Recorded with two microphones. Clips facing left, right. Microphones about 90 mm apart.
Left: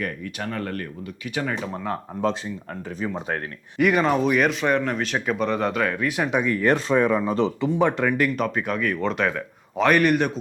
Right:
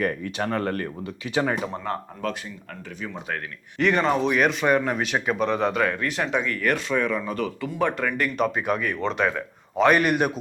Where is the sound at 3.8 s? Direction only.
5° left (ahead or behind).